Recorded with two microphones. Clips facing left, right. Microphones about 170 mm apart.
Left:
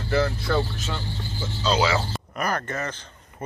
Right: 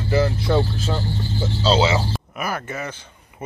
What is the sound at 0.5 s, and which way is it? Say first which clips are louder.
Speech: right 5 dB; 35° right (ahead or behind).